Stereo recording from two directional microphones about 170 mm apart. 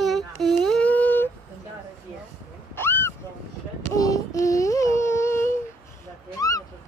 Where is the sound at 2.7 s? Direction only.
15° left (ahead or behind).